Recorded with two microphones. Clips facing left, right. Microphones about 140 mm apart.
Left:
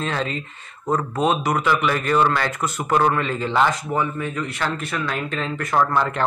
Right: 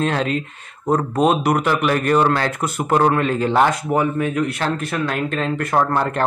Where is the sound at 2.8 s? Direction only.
35° right (ahead or behind).